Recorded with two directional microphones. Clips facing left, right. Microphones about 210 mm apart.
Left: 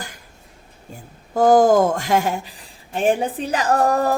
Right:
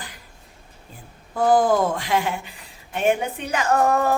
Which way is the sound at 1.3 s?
40° left (ahead or behind).